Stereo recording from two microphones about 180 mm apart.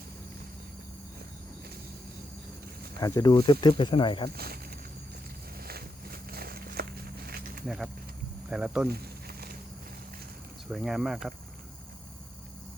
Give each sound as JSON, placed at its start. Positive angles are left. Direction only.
{"t": 3.0, "sound": "speech", "side_deg": 20}
{"t": 4.3, "sound": "speech", "side_deg": -60}
{"t": 5.5, "sound": "walk", "side_deg": -55}
{"t": 8.4, "sound": "speech", "side_deg": -5}
{"t": 8.9, "sound": "a sound", "side_deg": -60}
{"t": 10.7, "sound": "speech", "side_deg": 0}